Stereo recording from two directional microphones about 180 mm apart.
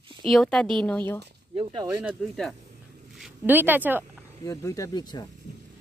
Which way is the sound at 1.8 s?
10° right (ahead or behind).